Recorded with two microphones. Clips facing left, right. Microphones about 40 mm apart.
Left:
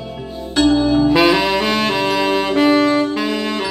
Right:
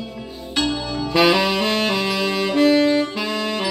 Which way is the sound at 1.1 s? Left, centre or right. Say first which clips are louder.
Left 3 dB; centre.